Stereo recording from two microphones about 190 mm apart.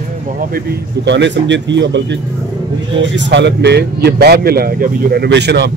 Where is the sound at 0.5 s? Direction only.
65° right (ahead or behind).